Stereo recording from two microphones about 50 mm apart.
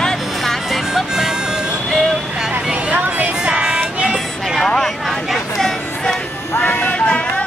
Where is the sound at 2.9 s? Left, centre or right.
Right.